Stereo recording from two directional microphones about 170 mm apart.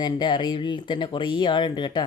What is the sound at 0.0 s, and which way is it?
Speech, 25° left (ahead or behind).